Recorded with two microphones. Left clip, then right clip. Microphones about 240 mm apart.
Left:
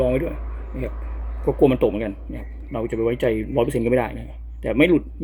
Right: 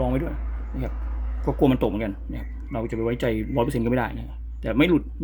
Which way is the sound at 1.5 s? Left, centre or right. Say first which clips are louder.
Left 4 dB; right.